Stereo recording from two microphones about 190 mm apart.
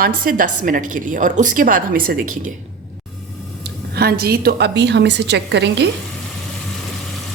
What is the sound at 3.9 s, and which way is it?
Speech, 55° right (ahead or behind).